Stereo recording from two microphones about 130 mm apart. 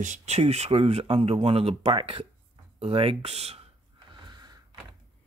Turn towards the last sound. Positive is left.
turn(degrees=-30)  # may be behind; listen again after turning